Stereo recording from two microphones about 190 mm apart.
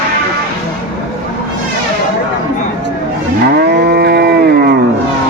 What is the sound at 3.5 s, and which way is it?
Moo, 55° right (ahead or behind).